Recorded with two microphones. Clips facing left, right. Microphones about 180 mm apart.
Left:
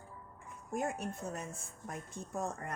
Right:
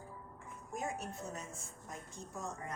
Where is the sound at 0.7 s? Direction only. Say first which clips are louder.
Left 4 dB; 55° left (ahead or behind).